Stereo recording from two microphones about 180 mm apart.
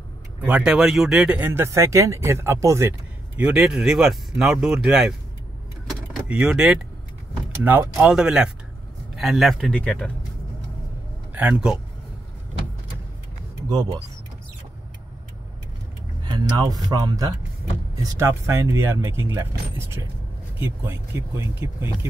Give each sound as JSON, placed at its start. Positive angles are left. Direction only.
{"t": 0.5, "sound": "speech", "side_deg": -5}
{"t": 5.9, "sound": "vehicle", "side_deg": -5}
{"t": 7.6, "sound": "speech", "side_deg": -10}
{"t": 11.3, "sound": "speech", "side_deg": -10}
{"t": 13.7, "sound": "speech", "side_deg": -25}
{"t": 16.2, "sound": "speech", "side_deg": -25}
{"t": 20.5, "sound": "speech", "side_deg": -15}